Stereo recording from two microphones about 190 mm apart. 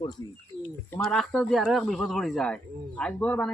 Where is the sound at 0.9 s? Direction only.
5° left (ahead or behind).